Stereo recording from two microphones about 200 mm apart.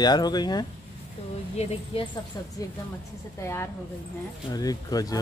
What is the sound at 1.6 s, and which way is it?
Speech, 30° left (ahead or behind).